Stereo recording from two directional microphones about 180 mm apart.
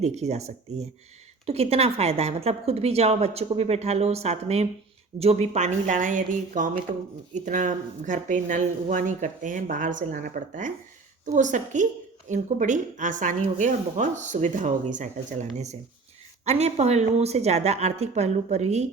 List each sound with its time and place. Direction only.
0.0 s a woman's voice: 40° right (ahead or behind)